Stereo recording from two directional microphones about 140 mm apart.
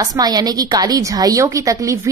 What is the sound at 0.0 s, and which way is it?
A woman's voice, 30° right (ahead or behind).